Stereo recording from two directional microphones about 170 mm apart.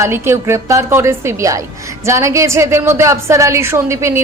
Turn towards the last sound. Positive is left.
turn(degrees=-15)  # may be behind; listen again after turning